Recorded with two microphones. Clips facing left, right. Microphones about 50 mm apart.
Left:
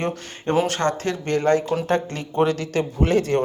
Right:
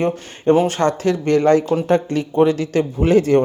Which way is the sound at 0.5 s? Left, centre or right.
Centre.